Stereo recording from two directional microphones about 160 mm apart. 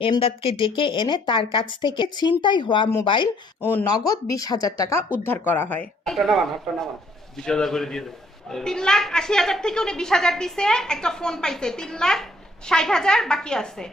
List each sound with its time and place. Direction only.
0.0 s speech: 35° left (ahead or behind)
3.6 s speech: 15° left (ahead or behind)
6.1 s a woman's voice: centre (ahead or behind)